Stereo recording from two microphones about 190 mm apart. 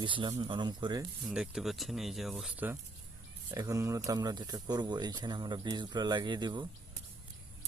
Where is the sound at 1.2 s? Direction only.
5° right (ahead or behind).